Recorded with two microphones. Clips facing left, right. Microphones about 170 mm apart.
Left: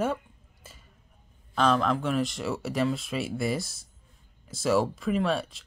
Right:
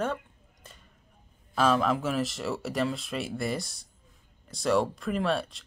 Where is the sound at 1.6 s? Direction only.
5° right (ahead or behind).